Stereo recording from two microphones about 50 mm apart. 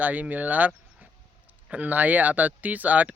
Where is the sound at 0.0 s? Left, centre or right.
Right.